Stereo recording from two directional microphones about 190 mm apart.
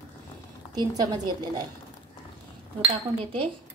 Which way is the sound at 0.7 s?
20° right (ahead or behind).